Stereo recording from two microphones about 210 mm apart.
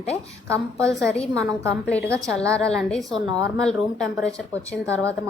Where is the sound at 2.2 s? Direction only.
Centre (ahead or behind).